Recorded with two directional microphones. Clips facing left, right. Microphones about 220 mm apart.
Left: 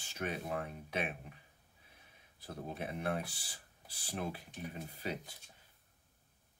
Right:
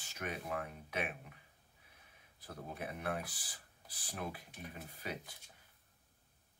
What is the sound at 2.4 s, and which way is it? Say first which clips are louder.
Speech: left 3 dB; 30° left (ahead or behind).